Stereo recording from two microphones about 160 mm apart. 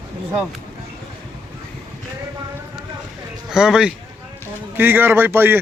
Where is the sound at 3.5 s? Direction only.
5° right (ahead or behind).